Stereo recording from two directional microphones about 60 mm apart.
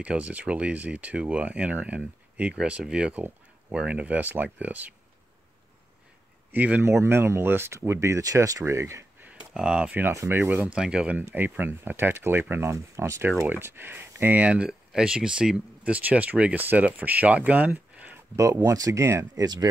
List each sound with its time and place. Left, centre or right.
0.0 s speech: right
6.5 s speech: right
6.8 s speech: right
8.6 s speech: right
9.5 s speech: centre
10.3 s speech: right
10.7 s speech: centre
11.3 s speech: right
12.7 s speech: right
13.5 s speech: right
14.7 s speech: centre
15.8 s speech: right
17.6 s a sound: right
18.3 s speech: right